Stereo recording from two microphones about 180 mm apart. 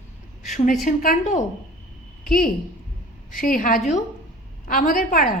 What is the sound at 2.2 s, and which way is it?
A woman's voice, 55° left (ahead or behind).